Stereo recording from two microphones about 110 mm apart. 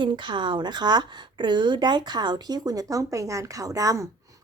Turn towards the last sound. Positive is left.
turn(degrees=-30)  # may be behind; listen again after turning